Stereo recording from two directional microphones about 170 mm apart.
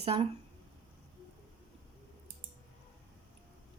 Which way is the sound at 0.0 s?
35° right (ahead or behind).